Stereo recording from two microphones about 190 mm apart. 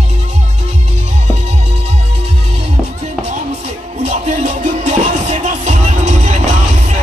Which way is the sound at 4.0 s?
40° right (ahead or behind).